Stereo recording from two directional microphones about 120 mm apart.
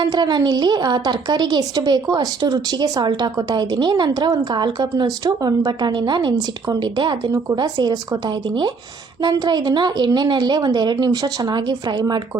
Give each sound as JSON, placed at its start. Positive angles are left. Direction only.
{"t": 0.0, "sound": "a woman's voice", "side_deg": -35}